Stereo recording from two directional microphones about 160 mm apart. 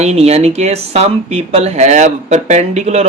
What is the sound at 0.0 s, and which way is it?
Speech, 40° right (ahead or behind).